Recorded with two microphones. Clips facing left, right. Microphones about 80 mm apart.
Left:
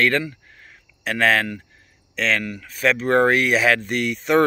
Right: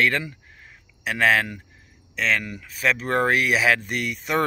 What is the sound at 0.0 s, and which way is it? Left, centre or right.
Speech, centre.